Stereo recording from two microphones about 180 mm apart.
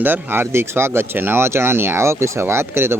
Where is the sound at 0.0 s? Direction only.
10° right (ahead or behind).